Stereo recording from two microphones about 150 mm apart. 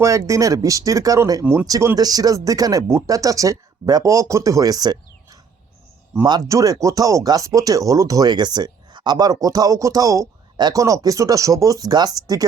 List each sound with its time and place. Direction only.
0.0 s speech: 20° right (ahead or behind)